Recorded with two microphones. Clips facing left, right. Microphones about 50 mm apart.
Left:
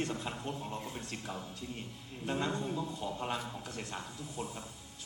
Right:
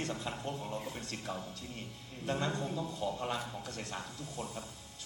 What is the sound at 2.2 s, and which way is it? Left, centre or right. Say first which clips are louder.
Speech: even; centre.